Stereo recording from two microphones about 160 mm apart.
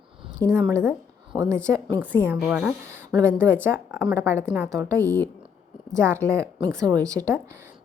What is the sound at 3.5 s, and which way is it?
A woman's voice, 15° right (ahead or behind).